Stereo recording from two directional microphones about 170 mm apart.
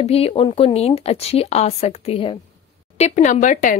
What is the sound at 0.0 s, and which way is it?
Speech, 35° left (ahead or behind).